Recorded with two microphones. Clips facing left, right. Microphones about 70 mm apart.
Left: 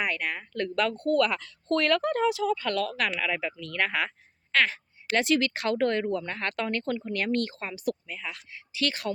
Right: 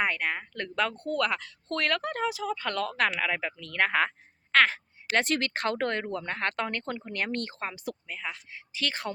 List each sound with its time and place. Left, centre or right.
0.0 s speech: right
1.1 s speech: centre
2.3 s speech: right